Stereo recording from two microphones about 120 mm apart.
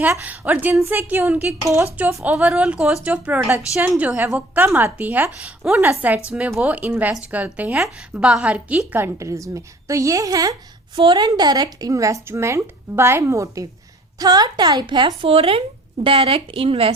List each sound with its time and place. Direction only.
0.1 s a woman's voice: 15° right (ahead or behind)
1.3 s a woman's voice: 5° right (ahead or behind)
1.6 s a woman's voice: 25° right (ahead or behind)
2.0 s a woman's voice: 15° right (ahead or behind)
9.0 s a woman's voice: 25° right (ahead or behind)
10.9 s a woman's voice: 45° right (ahead or behind)
11.3 s a woman's voice: 30° right (ahead or behind); by 16.9 s 50° right (ahead or behind)